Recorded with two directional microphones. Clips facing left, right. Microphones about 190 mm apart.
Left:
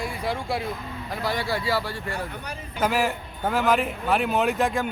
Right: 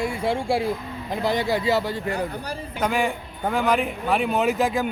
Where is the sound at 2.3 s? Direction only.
35° right (ahead or behind).